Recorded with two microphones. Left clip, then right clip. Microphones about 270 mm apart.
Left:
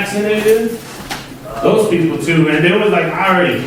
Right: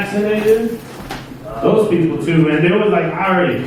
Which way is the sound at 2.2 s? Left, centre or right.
Centre.